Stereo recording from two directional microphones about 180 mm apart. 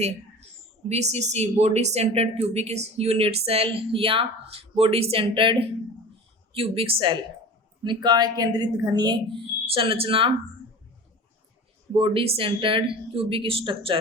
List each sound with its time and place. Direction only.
0.9 s a woman's voice: 35° right (ahead or behind)
11.9 s speech: 30° right (ahead or behind)